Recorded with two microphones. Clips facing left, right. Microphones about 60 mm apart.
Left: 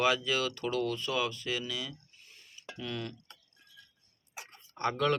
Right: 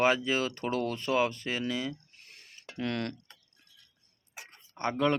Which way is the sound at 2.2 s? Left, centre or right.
Right.